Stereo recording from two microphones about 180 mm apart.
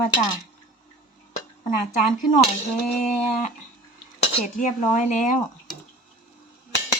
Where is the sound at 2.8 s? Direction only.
40° left (ahead or behind).